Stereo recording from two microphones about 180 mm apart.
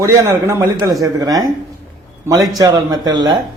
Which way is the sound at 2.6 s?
20° right (ahead or behind).